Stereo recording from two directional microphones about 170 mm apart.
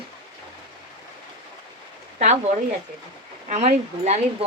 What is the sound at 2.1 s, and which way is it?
Speech, 40° right (ahead or behind).